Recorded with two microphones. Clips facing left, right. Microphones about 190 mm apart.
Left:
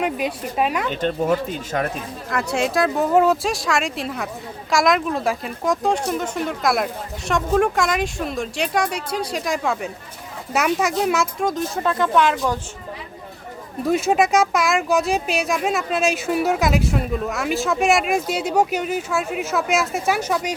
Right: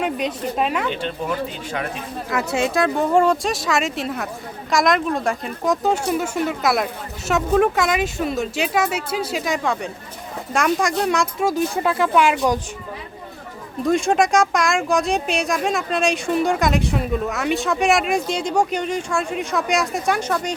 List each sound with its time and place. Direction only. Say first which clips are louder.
0.0 s speech: even; 5° left (ahead or behind)
0.9 s speech: left 4 dB; 45° left (ahead or behind)
2.3 s speech: even; centre (ahead or behind)
13.8 s speech: even; 5° left (ahead or behind)